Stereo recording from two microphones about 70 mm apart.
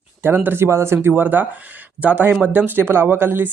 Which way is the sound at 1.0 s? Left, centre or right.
Right.